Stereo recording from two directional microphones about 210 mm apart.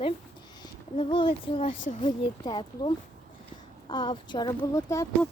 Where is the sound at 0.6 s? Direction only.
25° left (ahead or behind).